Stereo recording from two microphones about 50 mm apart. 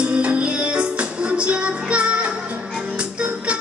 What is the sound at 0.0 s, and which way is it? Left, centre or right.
Music, right.